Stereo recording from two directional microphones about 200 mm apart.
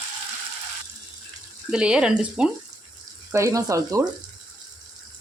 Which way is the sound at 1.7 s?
5° right (ahead or behind).